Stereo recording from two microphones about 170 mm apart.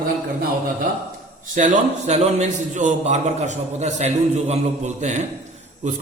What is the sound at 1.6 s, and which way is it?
A man's voice, 40° right (ahead or behind).